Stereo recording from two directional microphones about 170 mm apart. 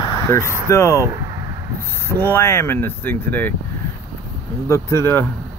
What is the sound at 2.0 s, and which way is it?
Speech, 15° left (ahead or behind).